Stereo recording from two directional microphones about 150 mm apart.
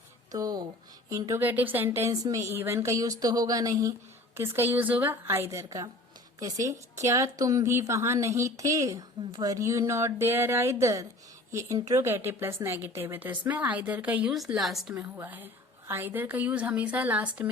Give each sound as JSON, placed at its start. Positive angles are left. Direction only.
{"t": 0.3, "sound": "a woman's voice", "side_deg": -25}
{"t": 14.9, "sound": "speech", "side_deg": -15}